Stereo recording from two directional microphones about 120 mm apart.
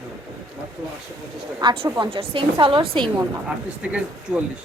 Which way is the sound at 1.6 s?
45° right (ahead or behind).